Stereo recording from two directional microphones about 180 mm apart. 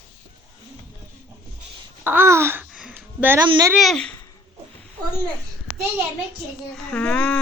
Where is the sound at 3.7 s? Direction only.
Centre (ahead or behind).